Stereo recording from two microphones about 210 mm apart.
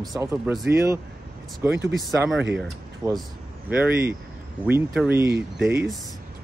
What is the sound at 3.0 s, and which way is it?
Speech, centre (ahead or behind).